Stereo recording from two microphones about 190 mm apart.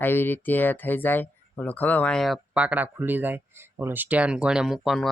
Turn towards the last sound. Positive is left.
turn(degrees=0)  # may be behind; listen again after turning